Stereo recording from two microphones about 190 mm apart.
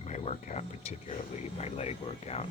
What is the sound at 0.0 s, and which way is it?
Speech, 35° left (ahead or behind).